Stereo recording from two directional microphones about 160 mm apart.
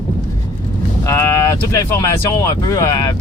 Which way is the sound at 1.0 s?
15° left (ahead or behind).